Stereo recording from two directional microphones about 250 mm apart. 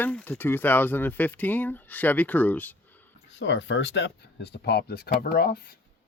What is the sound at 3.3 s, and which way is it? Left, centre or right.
Speech, left.